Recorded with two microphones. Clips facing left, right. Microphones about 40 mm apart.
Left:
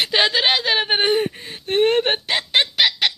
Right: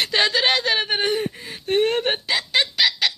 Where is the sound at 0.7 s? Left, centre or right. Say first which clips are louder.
Left 3 dB; left.